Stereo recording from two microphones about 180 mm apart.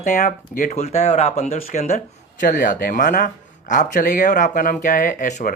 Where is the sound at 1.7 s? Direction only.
45° left (ahead or behind).